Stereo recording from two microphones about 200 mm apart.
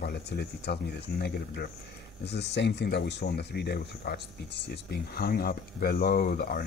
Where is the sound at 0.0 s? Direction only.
55° left (ahead or behind).